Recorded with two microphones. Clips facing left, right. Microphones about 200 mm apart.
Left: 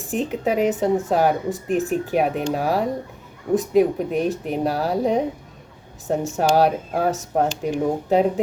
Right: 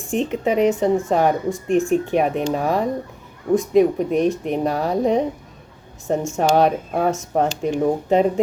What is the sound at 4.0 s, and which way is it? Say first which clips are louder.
A woman's voice: right 3 dB; centre (ahead or behind).